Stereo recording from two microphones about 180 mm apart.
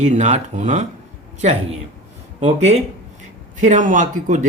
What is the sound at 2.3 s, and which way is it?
Speech, 40° right (ahead or behind).